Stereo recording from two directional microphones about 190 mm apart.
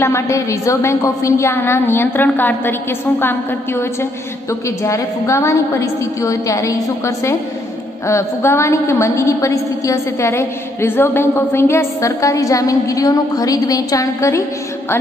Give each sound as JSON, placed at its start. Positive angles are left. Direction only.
{"t": 0.0, "sound": "a woman's voice", "side_deg": 15}